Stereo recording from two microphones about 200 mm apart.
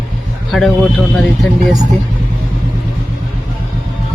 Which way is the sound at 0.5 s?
Centre (ahead or behind).